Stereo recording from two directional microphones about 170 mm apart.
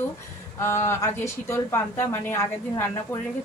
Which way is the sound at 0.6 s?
15° left (ahead or behind).